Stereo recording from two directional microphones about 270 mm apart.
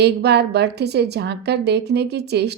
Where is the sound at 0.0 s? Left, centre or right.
Right.